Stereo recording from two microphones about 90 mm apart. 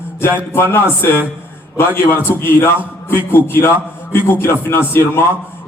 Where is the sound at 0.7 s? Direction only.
25° left (ahead or behind).